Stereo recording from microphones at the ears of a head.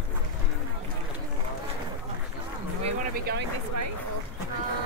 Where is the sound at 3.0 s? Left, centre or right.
Right.